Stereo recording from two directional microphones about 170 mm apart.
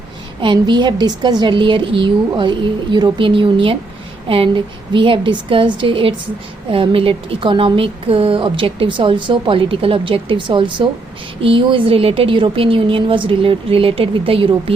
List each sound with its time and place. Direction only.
0.4 s a woman's voice: 25° right (ahead or behind)